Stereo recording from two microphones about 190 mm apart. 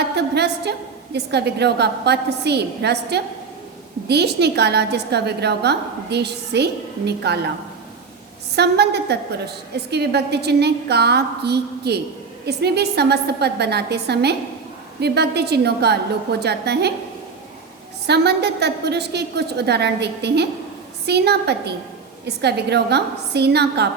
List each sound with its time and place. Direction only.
0.2 s a sound: 60° right (ahead or behind)
1.1 s a woman's voice: 60° right (ahead or behind)
8.5 s a woman's voice: 60° right (ahead or behind)
18.0 s a woman's voice: 60° right (ahead or behind)